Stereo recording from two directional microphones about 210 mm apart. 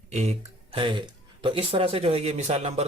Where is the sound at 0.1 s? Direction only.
30° right (ahead or behind).